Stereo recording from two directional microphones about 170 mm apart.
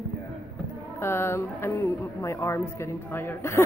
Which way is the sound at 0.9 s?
15° left (ahead or behind).